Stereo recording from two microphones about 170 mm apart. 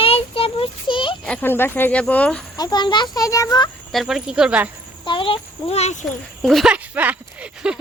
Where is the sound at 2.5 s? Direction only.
25° left (ahead or behind).